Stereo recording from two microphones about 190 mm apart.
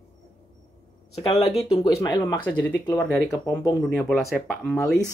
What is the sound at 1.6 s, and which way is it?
Speech, 20° left (ahead or behind).